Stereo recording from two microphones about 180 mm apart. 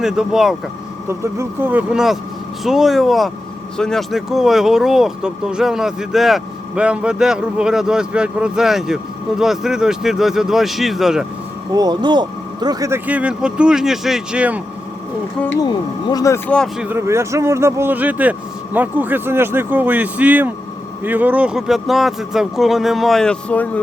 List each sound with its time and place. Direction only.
0.0 s speech: 5° right (ahead or behind)
1.0 s speech: 15° right (ahead or behind)
11.7 s speech: 20° right (ahead or behind)
13.1 s speech: 5° right (ahead or behind)
15.5 s speech: 25° left (ahead or behind)
16.5 s speech: 5° left (ahead or behind)
16.8 s speech: 15° right (ahead or behind); by 23.8 s 10° left (ahead or behind)